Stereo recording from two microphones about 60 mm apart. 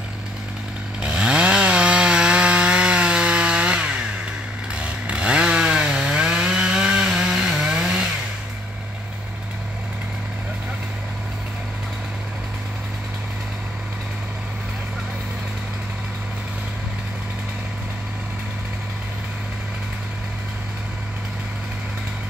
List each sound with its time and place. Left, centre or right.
1.0 s chainsaw: centre